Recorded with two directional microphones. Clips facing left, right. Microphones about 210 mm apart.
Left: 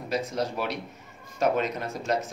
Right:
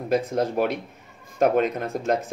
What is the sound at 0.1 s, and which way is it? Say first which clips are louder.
Speech: right 6 dB; 55° right (ahead or behind).